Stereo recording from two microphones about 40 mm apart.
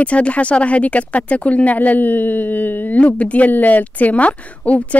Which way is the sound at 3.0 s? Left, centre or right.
Left.